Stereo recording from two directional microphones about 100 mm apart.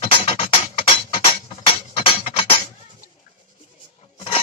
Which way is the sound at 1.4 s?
70° left (ahead or behind).